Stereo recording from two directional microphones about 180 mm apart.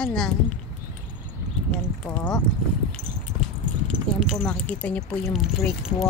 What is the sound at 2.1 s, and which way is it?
Speech, 10° left (ahead or behind).